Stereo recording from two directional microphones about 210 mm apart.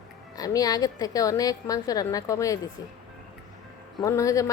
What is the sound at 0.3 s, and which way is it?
A woman's voice, 15° left (ahead or behind).